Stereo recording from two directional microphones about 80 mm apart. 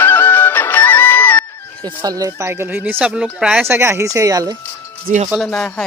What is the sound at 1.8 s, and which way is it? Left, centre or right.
Speech, right.